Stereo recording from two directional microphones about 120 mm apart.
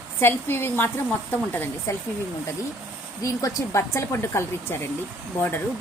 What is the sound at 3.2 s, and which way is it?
Speech, 30° left (ahead or behind).